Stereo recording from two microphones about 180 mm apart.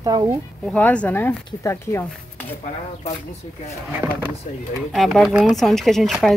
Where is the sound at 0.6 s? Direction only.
5° left (ahead or behind).